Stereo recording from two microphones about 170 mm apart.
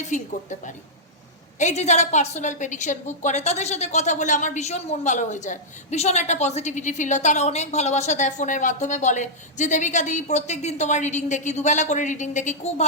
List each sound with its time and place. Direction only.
0.1 s a woman's voice: 45° left (ahead or behind)
1.5 s a woman's voice: 40° left (ahead or behind)